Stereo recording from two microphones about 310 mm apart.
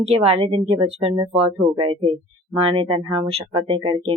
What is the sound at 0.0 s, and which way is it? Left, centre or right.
Speech, centre.